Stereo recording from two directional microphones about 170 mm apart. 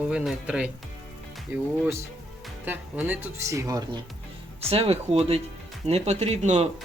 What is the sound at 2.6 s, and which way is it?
Speech, 10° right (ahead or behind).